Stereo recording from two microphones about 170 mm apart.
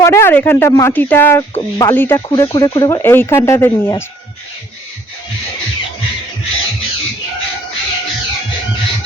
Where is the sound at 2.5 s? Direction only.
25° left (ahead or behind).